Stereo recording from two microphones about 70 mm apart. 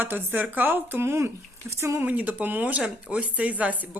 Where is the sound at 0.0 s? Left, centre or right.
Right.